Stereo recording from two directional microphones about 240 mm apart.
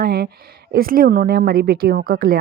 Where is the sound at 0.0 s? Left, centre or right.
Right.